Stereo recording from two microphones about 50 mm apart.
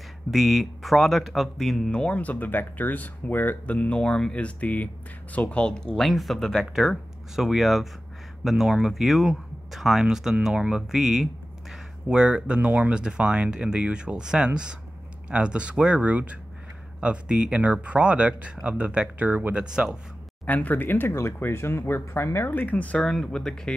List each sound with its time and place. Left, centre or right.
0.3 s speech: centre
1.9 s speech: left
4.0 s speech: centre
6.0 s speech: centre
6.9 s speech: centre
12.1 s speech: centre
16.0 s speech: right
19.5 s speech: centre
20.4 s speech: left
21.1 s speech: left
23.2 s speech: centre